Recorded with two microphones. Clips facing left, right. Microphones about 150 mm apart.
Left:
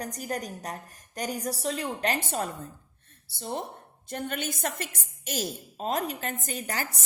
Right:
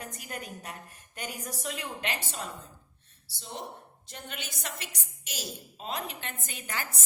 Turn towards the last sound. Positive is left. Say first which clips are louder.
# left 5 dB
turn(degrees=40)  # may be behind; listen again after turning